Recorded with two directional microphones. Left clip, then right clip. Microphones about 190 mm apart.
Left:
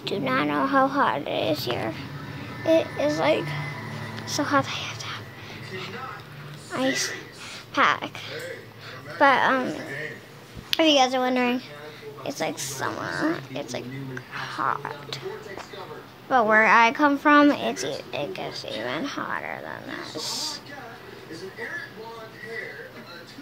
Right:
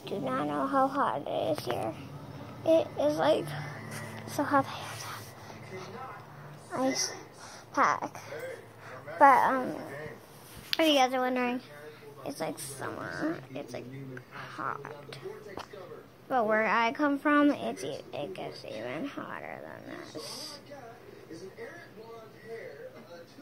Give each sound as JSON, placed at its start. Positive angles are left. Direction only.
{"t": 0.0, "sound": "a woman's voice", "side_deg": 5}
{"t": 1.7, "sound": "speech", "side_deg": -5}
{"t": 2.6, "sound": "a child's voice", "side_deg": -20}
{"t": 6.9, "sound": "a woman's voice", "side_deg": 10}
{"t": 9.2, "sound": "speech", "side_deg": -5}
{"t": 16.3, "sound": "speech", "side_deg": -10}